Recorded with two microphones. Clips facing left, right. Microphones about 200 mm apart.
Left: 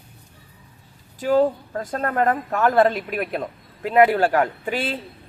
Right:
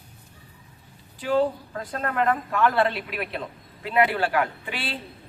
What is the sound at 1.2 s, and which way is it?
A man's voice, 45° left (ahead or behind).